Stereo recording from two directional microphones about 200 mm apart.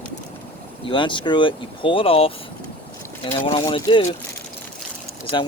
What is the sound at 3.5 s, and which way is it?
Speech, 20° left (ahead or behind).